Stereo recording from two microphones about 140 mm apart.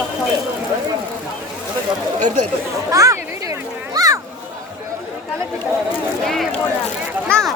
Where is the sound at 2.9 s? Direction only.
25° right (ahead or behind).